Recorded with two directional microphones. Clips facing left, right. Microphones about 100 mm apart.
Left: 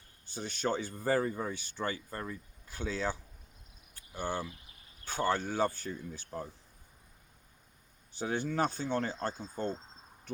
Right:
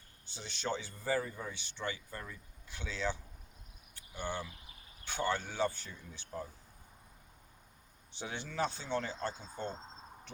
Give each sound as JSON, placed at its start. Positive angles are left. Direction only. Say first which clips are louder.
{"t": 0.3, "sound": "speech", "louder": "left 5 dB", "side_deg": 45}
{"t": 3.9, "sound": "cricket", "louder": "left 4 dB", "side_deg": 45}
{"t": 5.0, "sound": "speech", "louder": "left 4 dB", "side_deg": 40}
{"t": 8.1, "sound": "speech", "louder": "left 8 dB", "side_deg": 45}